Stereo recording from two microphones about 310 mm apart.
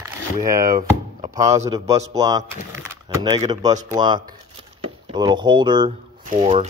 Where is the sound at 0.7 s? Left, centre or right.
Centre.